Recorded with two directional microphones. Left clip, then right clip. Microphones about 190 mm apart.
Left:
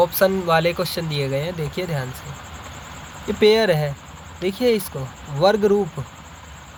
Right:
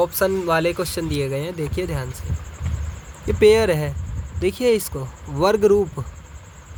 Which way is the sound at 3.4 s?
45° right (ahead or behind).